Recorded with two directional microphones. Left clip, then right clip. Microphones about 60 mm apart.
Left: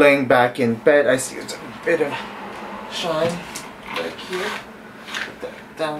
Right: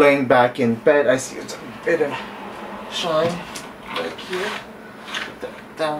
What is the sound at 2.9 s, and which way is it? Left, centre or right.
Speech, centre.